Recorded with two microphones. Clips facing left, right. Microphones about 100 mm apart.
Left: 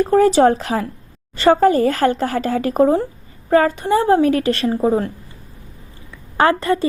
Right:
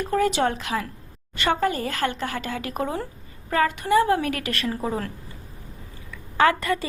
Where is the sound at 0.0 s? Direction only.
35° left (ahead or behind).